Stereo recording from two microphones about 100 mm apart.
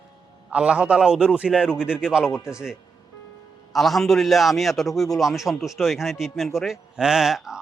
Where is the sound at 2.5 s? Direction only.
5° right (ahead or behind).